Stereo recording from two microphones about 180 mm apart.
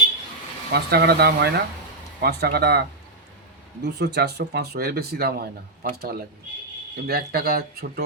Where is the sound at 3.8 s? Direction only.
70° right (ahead or behind).